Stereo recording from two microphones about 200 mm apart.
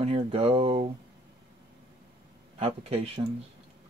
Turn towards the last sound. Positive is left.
turn(degrees=-30)  # may be behind; listen again after turning